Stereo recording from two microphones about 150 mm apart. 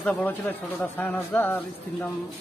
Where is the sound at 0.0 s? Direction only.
5° left (ahead or behind).